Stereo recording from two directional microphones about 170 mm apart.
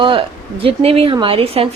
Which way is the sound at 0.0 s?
30° right (ahead or behind).